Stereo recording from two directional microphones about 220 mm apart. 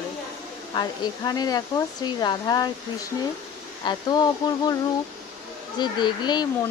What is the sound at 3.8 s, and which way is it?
Speech, 20° left (ahead or behind).